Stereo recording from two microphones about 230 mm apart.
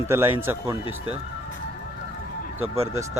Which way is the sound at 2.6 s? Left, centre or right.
Right.